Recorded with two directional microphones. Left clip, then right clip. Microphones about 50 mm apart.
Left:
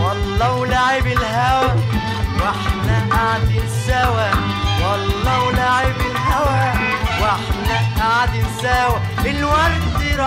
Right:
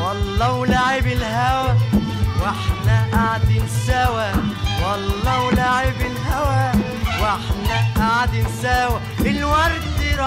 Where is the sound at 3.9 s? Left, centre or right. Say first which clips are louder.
Left 3 dB; right.